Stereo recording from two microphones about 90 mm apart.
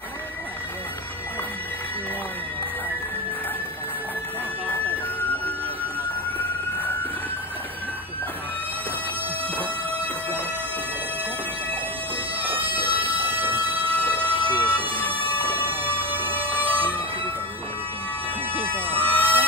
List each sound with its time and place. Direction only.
6.3 s a sound: 20° left (ahead or behind)
12.4 s a sound: 20° right (ahead or behind)
14.5 s emergency vehicle: 20° right (ahead or behind)
15.0 s siren: 80° right
15.4 s music: 20° right (ahead or behind)
18.5 s bagpipes: 20° right (ahead or behind)
18.9 s bagpipes: 20° left (ahead or behind)